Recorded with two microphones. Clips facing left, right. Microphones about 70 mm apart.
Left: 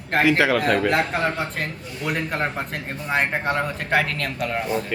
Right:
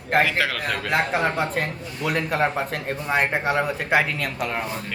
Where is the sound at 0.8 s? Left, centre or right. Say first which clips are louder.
Left 1 dB; centre.